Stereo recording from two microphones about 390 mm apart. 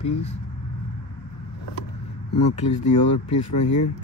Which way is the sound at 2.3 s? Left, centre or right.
Left.